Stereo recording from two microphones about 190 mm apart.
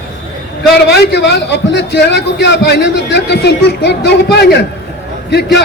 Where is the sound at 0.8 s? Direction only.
60° left (ahead or behind).